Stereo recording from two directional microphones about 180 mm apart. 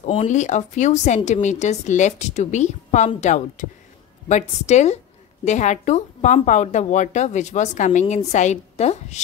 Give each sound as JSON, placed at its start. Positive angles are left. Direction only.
{"t": 0.0, "sound": "a woman's voice", "side_deg": 35}